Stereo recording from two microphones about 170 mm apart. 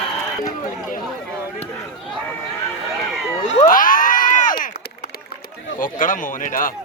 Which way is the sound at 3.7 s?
55° left (ahead or behind).